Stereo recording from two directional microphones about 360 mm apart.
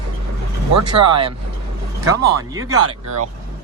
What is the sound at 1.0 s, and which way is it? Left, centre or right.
Speech, centre.